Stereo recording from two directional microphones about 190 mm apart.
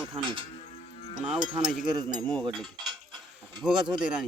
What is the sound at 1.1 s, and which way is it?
Speech, 5° right (ahead or behind).